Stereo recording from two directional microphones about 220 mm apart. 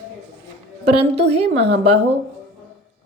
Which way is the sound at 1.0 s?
25° right (ahead or behind).